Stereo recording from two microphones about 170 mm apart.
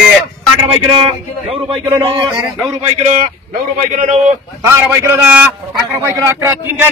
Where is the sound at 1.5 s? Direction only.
35° right (ahead or behind).